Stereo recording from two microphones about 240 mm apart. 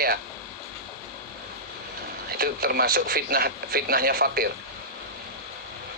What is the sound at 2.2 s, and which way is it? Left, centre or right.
A man's voice, right.